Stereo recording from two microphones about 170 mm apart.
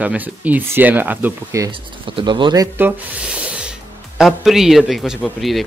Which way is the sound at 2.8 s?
10° right (ahead or behind).